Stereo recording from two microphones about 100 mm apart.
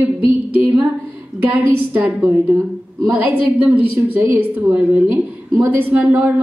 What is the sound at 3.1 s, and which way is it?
A woman's voice, 15° right (ahead or behind).